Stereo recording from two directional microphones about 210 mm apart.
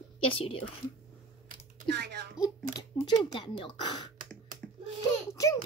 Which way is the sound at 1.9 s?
50° right (ahead or behind).